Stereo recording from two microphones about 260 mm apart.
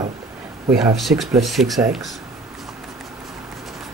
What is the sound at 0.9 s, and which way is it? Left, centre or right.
Speech, centre.